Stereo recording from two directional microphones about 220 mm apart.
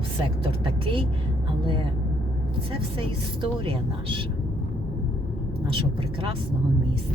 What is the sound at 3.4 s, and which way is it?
Speech, 20° right (ahead or behind).